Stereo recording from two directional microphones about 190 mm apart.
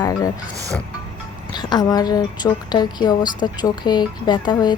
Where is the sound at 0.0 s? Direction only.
20° left (ahead or behind).